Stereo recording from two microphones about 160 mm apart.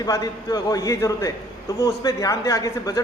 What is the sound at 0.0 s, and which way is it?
A man's voice, 25° left (ahead or behind).